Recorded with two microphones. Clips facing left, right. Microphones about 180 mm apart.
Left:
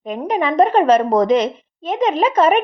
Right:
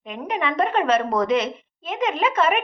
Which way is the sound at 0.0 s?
40° left (ahead or behind).